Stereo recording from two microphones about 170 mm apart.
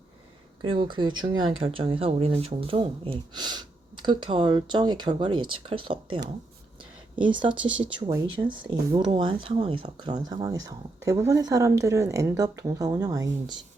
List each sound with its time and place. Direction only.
0.6 s speech: 30° right (ahead or behind)
7.3 s speech: 30° right (ahead or behind)